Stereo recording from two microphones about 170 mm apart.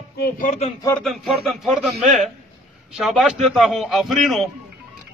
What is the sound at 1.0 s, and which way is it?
A man's voice, centre (ahead or behind).